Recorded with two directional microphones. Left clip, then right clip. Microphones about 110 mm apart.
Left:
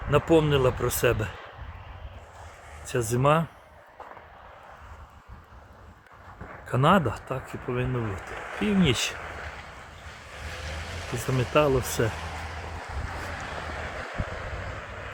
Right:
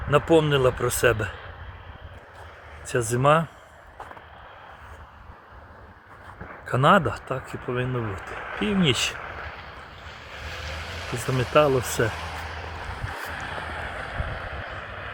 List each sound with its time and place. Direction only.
0.1 s speech: 5° left (ahead or behind)
2.8 s speech: 5° left (ahead or behind)
6.7 s speech: 10° left (ahead or behind)
8.4 s a sound: 25° left (ahead or behind)
8.6 s speech: 10° left (ahead or behind)
9.1 s boat: 25° left (ahead or behind)
11.8 s speech: 10° left (ahead or behind)
12.0 s a sound: 30° left (ahead or behind)